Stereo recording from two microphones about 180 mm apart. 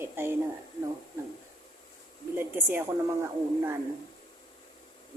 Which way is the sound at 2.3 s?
15° right (ahead or behind).